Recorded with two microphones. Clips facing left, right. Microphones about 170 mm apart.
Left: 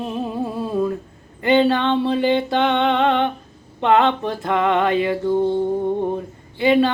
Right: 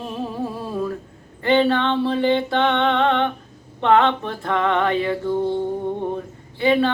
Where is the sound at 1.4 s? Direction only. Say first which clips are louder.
Left 1 dB; 15° left (ahead or behind).